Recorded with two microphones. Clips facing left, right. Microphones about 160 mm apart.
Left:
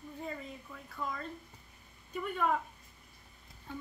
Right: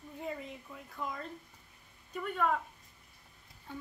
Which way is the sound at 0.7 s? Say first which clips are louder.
Left 1 dB; 15° right (ahead or behind).